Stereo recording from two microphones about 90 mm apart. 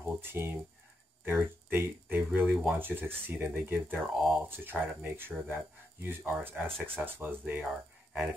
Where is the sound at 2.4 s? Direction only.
5° right (ahead or behind).